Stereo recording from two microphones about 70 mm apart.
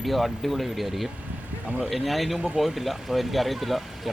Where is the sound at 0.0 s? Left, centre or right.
Centre.